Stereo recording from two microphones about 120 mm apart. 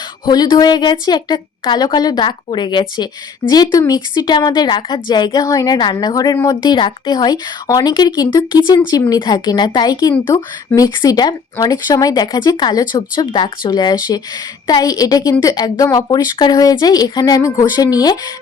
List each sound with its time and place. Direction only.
0.3 s speech: 35° left (ahead or behind)